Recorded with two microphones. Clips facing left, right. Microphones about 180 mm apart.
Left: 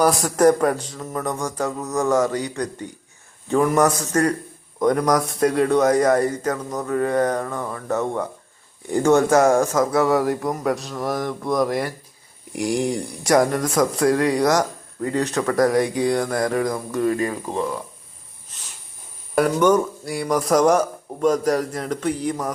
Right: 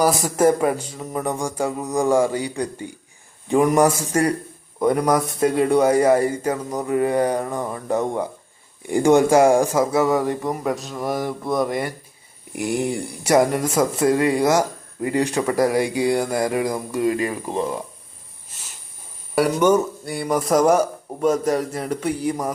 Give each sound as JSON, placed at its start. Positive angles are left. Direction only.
{"t": 0.0, "sound": "speech", "side_deg": -5}
{"t": 10.2, "sound": "speech", "side_deg": 5}
{"t": 19.4, "sound": "speech", "side_deg": -10}